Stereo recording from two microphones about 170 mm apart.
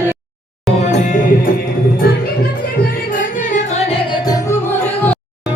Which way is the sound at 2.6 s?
60° left (ahead or behind).